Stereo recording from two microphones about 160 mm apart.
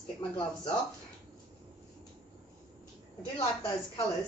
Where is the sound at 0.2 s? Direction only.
30° left (ahead or behind).